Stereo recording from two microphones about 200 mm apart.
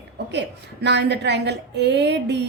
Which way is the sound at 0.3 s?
60° right (ahead or behind).